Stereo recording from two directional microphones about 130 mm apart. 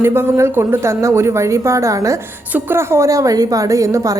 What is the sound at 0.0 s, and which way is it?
A woman's voice, 20° right (ahead or behind).